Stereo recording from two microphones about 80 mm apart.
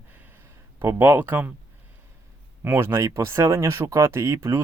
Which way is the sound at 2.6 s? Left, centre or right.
Right.